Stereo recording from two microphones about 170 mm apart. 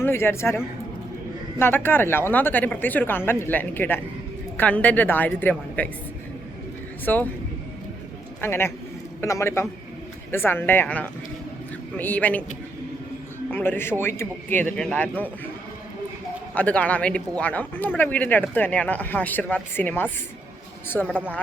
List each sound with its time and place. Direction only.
0.0 s speech: 15° left (ahead or behind)
7.0 s speech: 10° left (ahead or behind)
8.4 s speech: 15° left (ahead or behind)
13.5 s speech: 10° left (ahead or behind)
16.6 s speech: 10° left (ahead or behind)